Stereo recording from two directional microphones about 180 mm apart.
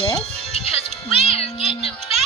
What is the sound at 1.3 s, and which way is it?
Music, 30° left (ahead or behind).